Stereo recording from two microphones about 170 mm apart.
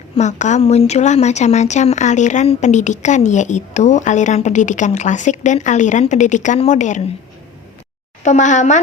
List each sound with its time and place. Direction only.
0.2 s speech: 45° left (ahead or behind)
8.2 s speech: 45° left (ahead or behind)